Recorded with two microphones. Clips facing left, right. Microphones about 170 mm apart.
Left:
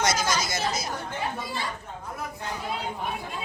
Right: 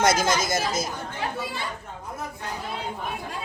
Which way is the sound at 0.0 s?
55° right (ahead or behind).